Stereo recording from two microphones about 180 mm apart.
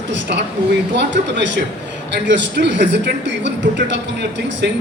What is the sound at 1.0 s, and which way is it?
A woman's voice, 80° right.